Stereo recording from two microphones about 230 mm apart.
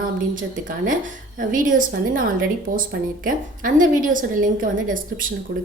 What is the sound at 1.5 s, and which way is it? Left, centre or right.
A woman's voice, right.